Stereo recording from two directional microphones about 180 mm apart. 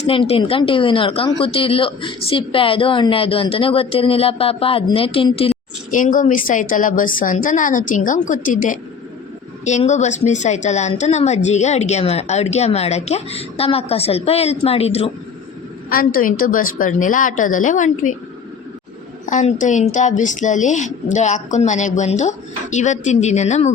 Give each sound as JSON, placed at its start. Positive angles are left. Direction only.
{"t": 0.0, "sound": "a woman's voice", "side_deg": 35}
{"t": 5.9, "sound": "a woman's voice", "side_deg": 45}
{"t": 15.9, "sound": "a woman's voice", "side_deg": 55}
{"t": 19.2, "sound": "a woman's voice", "side_deg": 45}